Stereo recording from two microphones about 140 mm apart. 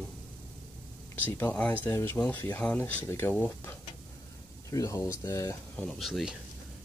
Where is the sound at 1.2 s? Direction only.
15° left (ahead or behind).